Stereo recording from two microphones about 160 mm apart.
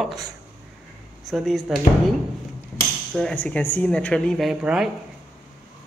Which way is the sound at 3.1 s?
5° left (ahead or behind).